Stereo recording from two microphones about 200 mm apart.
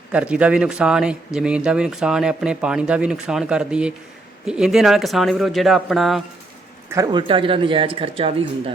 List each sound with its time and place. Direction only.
0.1 s speech: 5° right (ahead or behind)
6.9 s speech: 20° right (ahead or behind)